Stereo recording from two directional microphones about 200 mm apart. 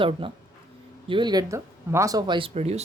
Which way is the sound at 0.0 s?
25° right (ahead or behind).